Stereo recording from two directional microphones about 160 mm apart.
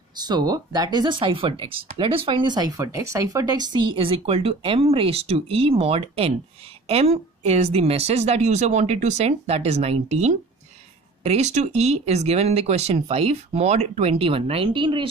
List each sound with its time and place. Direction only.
0.2 s speech: 25° right (ahead or behind)